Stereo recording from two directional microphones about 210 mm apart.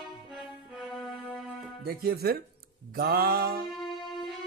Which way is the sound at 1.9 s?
50° right (ahead or behind).